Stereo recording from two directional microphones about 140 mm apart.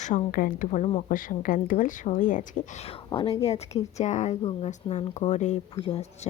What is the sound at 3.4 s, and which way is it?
Speech, 50° left (ahead or behind).